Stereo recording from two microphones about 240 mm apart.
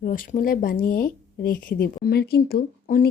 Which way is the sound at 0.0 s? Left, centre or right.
Left.